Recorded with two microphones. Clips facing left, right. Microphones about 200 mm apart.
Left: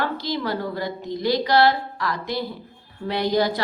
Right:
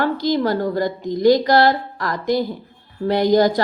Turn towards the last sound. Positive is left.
turn(degrees=-45)  # may be behind; listen again after turning